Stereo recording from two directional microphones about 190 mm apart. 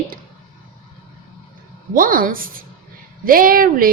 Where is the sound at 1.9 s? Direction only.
50° right (ahead or behind).